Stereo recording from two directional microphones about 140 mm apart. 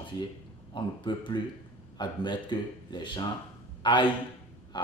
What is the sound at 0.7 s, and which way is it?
Speech, 35° left (ahead or behind).